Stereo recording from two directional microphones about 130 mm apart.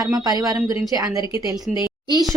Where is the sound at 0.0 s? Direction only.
30° right (ahead or behind).